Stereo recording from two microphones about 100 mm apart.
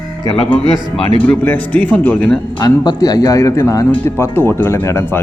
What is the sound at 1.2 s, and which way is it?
Speech, 15° left (ahead or behind).